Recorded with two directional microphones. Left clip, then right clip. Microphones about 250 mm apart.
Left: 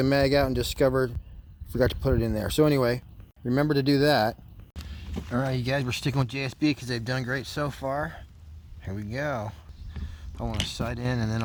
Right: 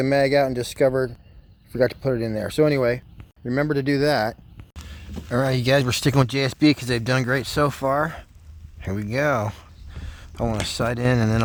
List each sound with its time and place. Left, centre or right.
0.0 s speech: centre
5.3 s speech: right